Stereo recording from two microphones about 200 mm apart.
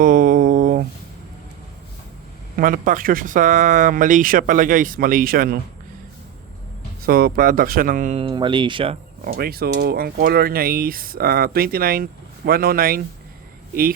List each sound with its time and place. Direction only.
0.0 s a sound: 45° right (ahead or behind)
2.6 s speech: 45° right (ahead or behind)
7.0 s speech: 45° right (ahead or behind)
8.2 s speech: 25° right (ahead or behind)
9.2 s speech: 50° right (ahead or behind)